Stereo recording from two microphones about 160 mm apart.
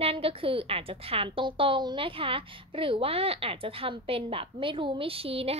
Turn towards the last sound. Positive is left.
turn(degrees=-35)  # may be behind; listen again after turning